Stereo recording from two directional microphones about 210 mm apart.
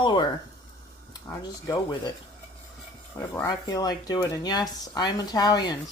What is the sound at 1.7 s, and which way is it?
Speech, 20° left (ahead or behind).